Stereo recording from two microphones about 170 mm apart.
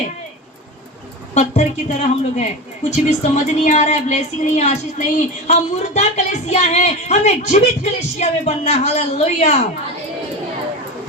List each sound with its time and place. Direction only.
1.3 s speech: 40° left (ahead or behind)